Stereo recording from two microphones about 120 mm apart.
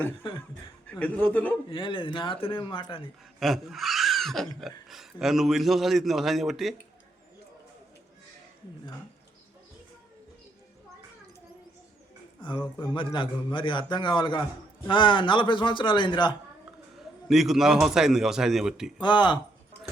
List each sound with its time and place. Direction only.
0.2 s speech: 45° left (ahead or behind)
0.9 s a man's voice: 10° left (ahead or behind)
1.7 s speech: 45° left (ahead or behind)
3.4 s a man's voice: centre (ahead or behind)
12.8 s a man's voice: 40° left (ahead or behind)
17.2 s a man's voice: centre (ahead or behind)
19.0 s a man's voice: 40° left (ahead or behind)